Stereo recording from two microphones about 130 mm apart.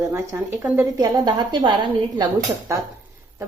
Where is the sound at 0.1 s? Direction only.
15° right (ahead or behind).